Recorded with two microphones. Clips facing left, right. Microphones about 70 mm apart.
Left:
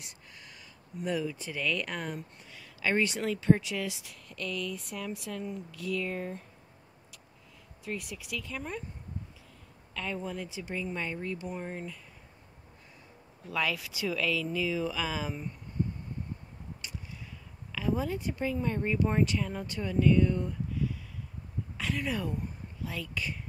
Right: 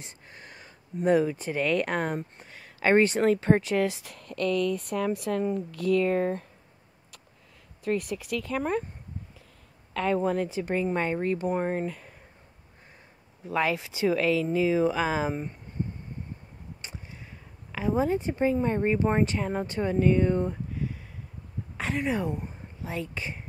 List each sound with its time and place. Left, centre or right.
0.0 s speech: right
7.8 s speech: right
9.9 s speech: right
13.5 s speech: right
16.8 s a sound: right
17.7 s speech: right